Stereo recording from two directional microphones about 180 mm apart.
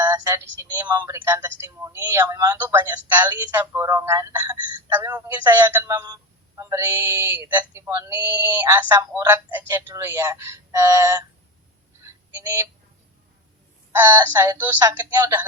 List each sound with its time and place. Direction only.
0.0 s a sound: 20° right (ahead or behind)
0.6 s a man's voice: 15° right (ahead or behind)
12.0 s music: 15° right (ahead or behind)
13.9 s a man's voice: 10° right (ahead or behind)